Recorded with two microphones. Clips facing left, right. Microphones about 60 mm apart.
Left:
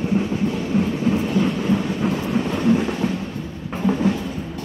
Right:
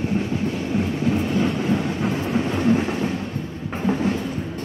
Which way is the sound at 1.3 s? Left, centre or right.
Centre.